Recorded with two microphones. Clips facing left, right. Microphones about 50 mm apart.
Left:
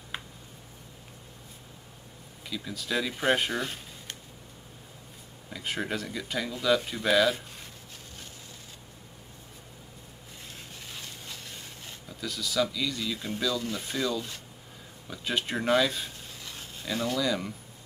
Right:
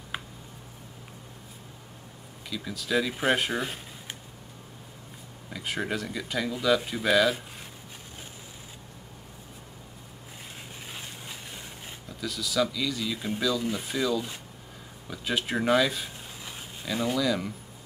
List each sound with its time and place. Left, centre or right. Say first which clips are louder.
2.5 s speech: right 3 dB; centre
5.5 s speech: right 1 dB; centre
10.9 s a sound: right 1 dB; centre
12.1 s speech: right 1 dB; centre